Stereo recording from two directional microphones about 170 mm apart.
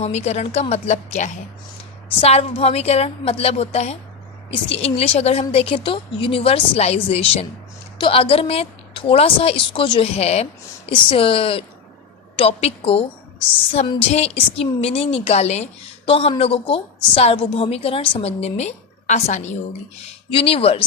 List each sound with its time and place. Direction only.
0.0 s a woman's voice: 40° left (ahead or behind)
20.3 s a woman's voice: 35° left (ahead or behind)